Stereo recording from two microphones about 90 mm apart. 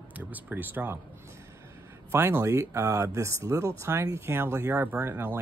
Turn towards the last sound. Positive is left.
turn(degrees=-20)  # may be behind; listen again after turning